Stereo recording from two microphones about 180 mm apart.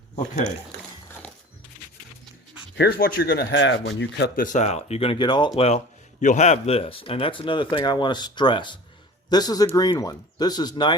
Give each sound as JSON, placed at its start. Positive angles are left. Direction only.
{"t": 2.7, "sound": "a man's voice", "side_deg": 60}
{"t": 4.4, "sound": "speech", "side_deg": 45}
{"t": 5.5, "sound": "speech", "side_deg": 35}